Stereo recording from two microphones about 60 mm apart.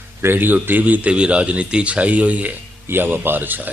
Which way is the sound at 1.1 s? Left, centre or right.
Centre.